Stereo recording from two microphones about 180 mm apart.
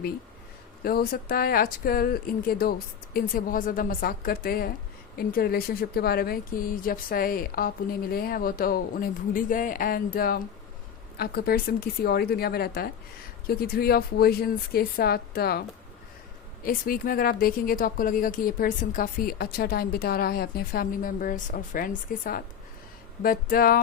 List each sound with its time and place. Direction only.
0.9 s speech: 55° left (ahead or behind)
16.6 s speech: 55° left (ahead or behind)